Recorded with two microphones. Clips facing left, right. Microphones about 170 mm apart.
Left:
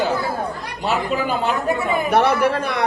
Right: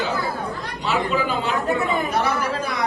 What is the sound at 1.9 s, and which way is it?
Speech, 65° left (ahead or behind).